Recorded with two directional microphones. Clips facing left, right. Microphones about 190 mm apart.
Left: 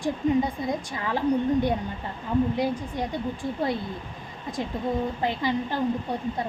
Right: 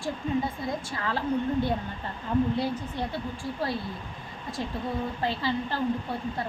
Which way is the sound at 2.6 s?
15° left (ahead or behind).